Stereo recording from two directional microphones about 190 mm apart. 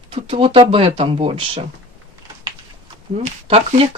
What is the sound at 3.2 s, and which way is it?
Speech, 30° right (ahead or behind).